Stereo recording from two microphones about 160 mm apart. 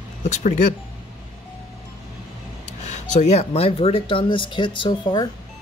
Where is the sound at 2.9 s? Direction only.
45° left (ahead or behind).